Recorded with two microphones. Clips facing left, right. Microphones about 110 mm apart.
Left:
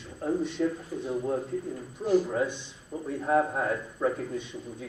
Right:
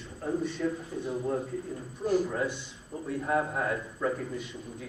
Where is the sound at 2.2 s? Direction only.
5° left (ahead or behind).